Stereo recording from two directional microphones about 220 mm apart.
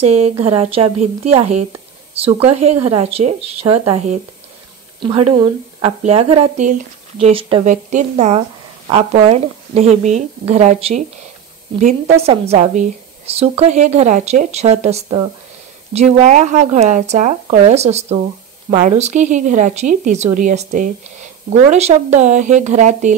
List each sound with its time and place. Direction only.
0.0 s speech: 30° right (ahead or behind)
5.3 s speech: 25° right (ahead or behind)
12.2 s speech: 30° right (ahead or behind)